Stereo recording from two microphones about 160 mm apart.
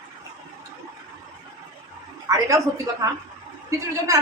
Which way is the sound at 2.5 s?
20° right (ahead or behind).